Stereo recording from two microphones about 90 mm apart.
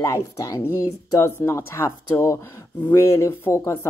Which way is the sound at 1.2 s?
30° left (ahead or behind).